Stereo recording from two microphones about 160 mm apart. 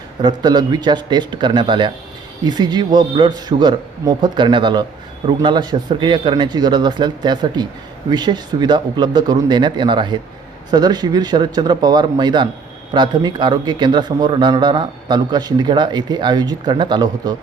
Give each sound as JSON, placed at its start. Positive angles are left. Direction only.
{"t": 0.2, "sound": "a man's voice", "side_deg": -25}